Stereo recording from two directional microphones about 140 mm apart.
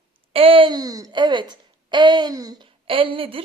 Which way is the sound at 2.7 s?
40° right (ahead or behind).